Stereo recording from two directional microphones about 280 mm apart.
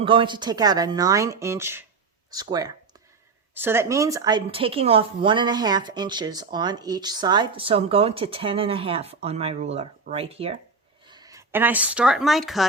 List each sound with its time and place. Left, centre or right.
0.0 s a woman's voice: centre